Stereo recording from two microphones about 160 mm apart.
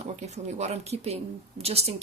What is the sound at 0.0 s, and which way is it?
Speech, 45° right (ahead or behind).